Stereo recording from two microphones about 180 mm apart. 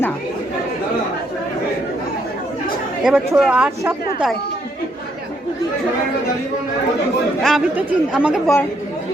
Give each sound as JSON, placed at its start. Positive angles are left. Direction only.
{"t": 3.0, "sound": "speech", "side_deg": -5}
{"t": 7.4, "sound": "speech", "side_deg": -5}